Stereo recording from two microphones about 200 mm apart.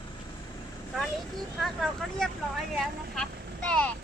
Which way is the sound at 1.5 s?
Centre (ahead or behind).